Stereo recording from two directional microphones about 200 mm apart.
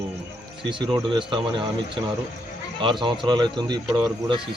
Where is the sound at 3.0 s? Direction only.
25° right (ahead or behind).